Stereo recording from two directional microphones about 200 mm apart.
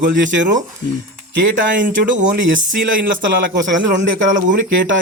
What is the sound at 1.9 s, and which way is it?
Speech, 45° right (ahead or behind).